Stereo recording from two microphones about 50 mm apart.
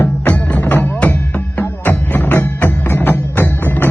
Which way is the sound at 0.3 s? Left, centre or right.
Left.